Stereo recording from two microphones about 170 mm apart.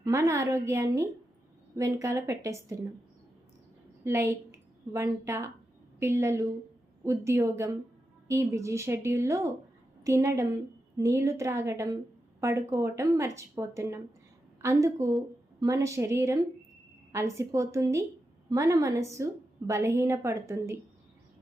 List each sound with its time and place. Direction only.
0.0 s a woman's voice: 15° right (ahead or behind)
4.0 s a woman's voice: 15° right (ahead or behind)